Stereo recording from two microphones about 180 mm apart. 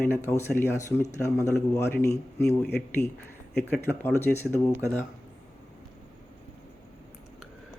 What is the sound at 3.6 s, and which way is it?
Speech, 10° left (ahead or behind).